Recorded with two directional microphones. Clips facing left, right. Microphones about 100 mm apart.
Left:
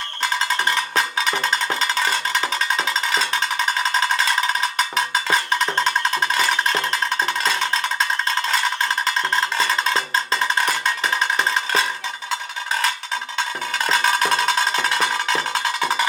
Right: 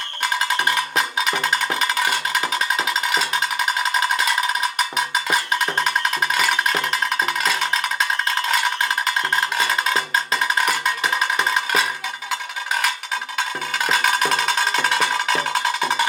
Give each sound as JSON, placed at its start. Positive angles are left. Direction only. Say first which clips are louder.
{"t": 0.7, "sound": "cowbell", "louder": "even", "side_deg": 30}
{"t": 4.9, "sound": "music", "louder": "left 2 dB", "side_deg": 30}
{"t": 6.3, "sound": "cowbell", "louder": "even", "side_deg": 30}
{"t": 9.6, "sound": "cowbell", "louder": "even", "side_deg": 30}
{"t": 10.6, "sound": "music", "louder": "right 1 dB", "side_deg": 35}
{"t": 13.8, "sound": "music", "louder": "left 1 dB", "side_deg": 35}